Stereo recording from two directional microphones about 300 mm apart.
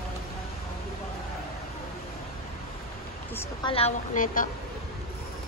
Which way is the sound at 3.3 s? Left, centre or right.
Centre.